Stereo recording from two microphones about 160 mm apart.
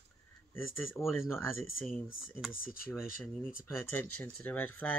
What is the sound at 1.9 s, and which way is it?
Speech, 5° right (ahead or behind).